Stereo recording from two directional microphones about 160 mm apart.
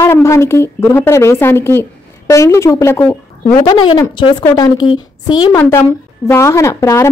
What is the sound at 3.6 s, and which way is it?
A woman's voice, 30° left (ahead or behind).